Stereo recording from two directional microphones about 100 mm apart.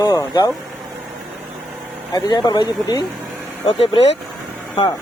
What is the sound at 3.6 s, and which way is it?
Speech, 55° left (ahead or behind).